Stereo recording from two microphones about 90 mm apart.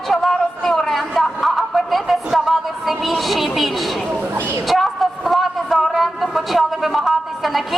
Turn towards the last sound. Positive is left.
turn(degrees=0)  # may be behind; listen again after turning